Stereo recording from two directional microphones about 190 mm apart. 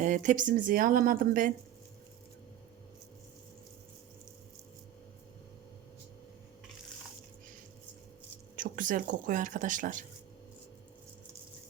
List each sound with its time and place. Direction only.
0.0 s speech: 40° right (ahead or behind)
8.5 s speech: 45° right (ahead or behind)